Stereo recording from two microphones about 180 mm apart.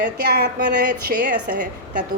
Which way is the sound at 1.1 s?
50° right (ahead or behind).